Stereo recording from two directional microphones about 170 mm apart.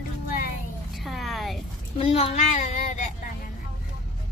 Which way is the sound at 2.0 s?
35° left (ahead or behind).